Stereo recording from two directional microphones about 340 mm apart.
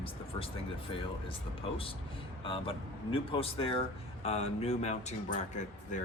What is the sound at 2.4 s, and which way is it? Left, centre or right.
Speech, centre.